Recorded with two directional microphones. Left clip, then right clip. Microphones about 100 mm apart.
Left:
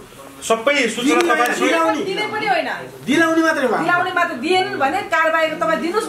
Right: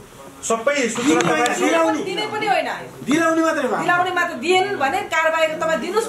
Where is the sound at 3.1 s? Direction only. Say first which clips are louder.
Left 2 dB; 5° left (ahead or behind).